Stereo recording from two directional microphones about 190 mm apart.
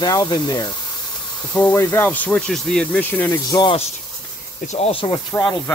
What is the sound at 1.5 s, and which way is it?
Speech, 10° left (ahead or behind).